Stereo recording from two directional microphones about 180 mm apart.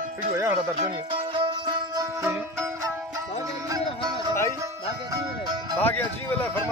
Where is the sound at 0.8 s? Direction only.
30° right (ahead or behind).